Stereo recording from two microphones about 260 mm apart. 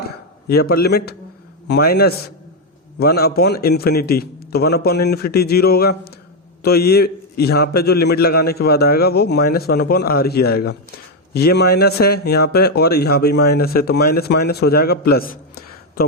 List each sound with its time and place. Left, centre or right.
0.4 s speech: left